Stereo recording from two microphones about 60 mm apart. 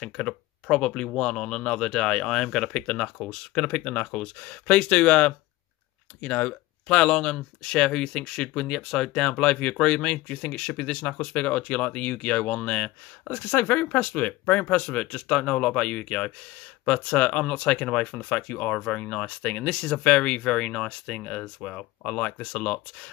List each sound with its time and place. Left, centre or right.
0.0 s speech: centre
6.9 s speech: centre